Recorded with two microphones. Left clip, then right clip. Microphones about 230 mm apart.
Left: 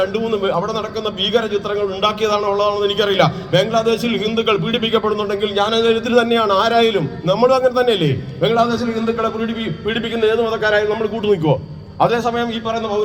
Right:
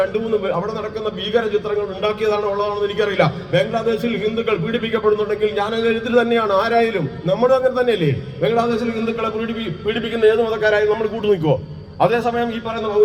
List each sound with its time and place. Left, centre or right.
2.0 s a man's voice: left
9.8 s a man's voice: left